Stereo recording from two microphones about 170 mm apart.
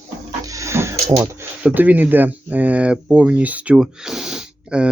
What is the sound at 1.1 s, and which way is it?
Speech, 15° right (ahead or behind).